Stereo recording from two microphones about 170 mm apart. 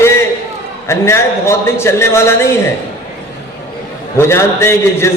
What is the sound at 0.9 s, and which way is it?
A man's voice, 15° left (ahead or behind).